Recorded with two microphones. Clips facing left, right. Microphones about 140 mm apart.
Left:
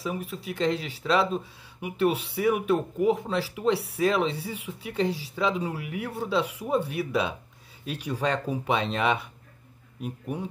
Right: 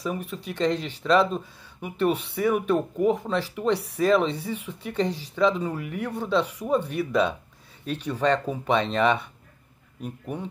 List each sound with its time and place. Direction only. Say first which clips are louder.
0.0 s speech: right 2 dB; 5° left (ahead or behind)